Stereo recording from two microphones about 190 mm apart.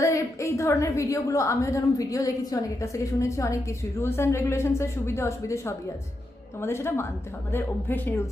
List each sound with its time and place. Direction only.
0.0 s a woman's voice: 15° left (ahead or behind)